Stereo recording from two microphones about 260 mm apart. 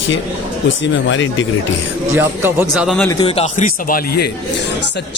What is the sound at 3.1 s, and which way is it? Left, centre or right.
Speech, centre.